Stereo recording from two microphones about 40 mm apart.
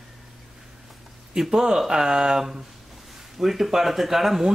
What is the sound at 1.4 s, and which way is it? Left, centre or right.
Speech, centre.